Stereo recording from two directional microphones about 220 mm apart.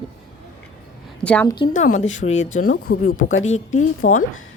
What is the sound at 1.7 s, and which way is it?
Speech, 35° left (ahead or behind).